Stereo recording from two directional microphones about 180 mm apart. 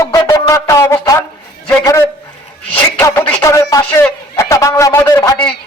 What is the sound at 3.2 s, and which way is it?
A man's voice, 15° left (ahead or behind).